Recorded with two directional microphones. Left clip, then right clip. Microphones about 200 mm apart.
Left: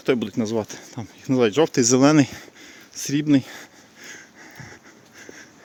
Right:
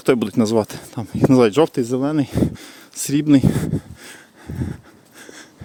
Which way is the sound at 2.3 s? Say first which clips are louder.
Right 15 dB; 30° right (ahead or behind).